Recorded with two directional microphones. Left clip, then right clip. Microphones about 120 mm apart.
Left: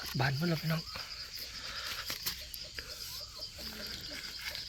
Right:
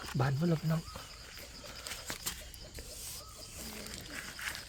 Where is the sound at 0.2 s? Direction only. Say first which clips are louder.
Left 1 dB; 15° right (ahead or behind).